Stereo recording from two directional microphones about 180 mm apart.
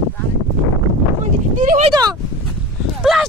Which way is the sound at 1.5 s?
45° right (ahead or behind).